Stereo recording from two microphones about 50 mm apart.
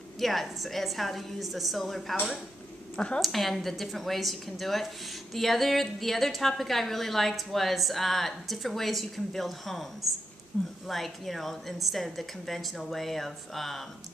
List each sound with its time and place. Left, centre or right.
0.2 s a woman's voice: centre
3.2 s a woman's voice: centre
10.5 s speech: left
10.9 s a woman's voice: centre